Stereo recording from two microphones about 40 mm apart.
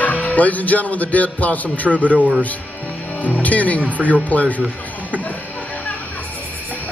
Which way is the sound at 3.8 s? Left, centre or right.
Right.